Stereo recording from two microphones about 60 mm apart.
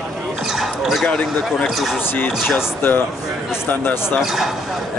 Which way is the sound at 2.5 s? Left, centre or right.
Left.